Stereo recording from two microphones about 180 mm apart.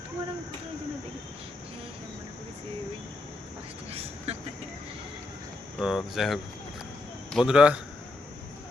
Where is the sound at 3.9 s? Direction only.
35° right (ahead or behind).